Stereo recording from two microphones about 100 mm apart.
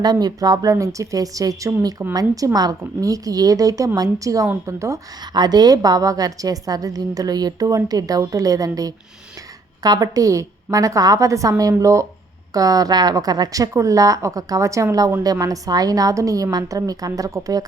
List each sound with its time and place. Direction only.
0.0 s a woman's voice: 45° right (ahead or behind)
5.3 s a woman's voice: 45° right (ahead or behind)